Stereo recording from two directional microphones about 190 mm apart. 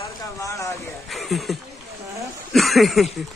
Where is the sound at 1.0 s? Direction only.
Centre (ahead or behind).